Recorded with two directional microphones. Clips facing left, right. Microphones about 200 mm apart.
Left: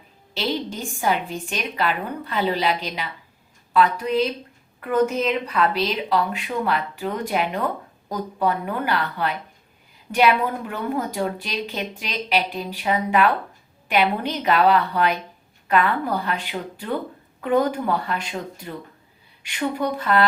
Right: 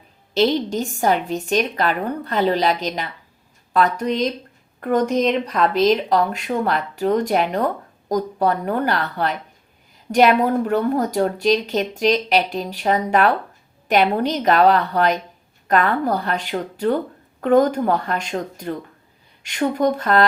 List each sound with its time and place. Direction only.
0.3 s a woman's voice: 40° right (ahead or behind)
5.5 s a woman's voice: 40° right (ahead or behind)